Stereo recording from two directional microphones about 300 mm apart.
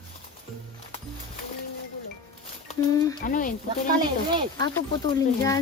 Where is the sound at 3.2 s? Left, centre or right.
Left.